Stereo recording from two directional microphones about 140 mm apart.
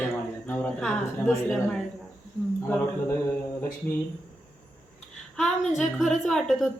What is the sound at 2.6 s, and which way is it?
Speech, 15° left (ahead or behind).